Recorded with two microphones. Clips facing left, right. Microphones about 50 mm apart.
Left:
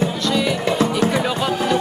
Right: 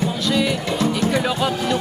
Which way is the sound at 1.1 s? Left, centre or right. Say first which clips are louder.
Even; centre.